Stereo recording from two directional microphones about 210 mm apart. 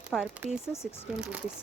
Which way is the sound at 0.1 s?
Centre (ahead or behind).